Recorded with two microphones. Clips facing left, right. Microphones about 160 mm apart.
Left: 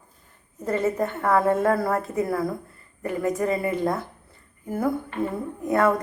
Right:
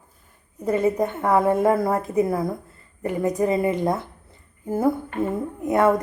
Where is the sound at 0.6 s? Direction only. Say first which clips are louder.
Right 3 dB; 10° right (ahead or behind).